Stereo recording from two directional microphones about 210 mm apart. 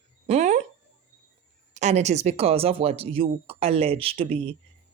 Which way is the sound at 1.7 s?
35° right (ahead or behind).